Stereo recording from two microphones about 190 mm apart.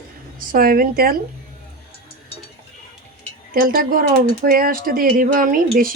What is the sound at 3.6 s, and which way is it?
Speech, 50° right (ahead or behind).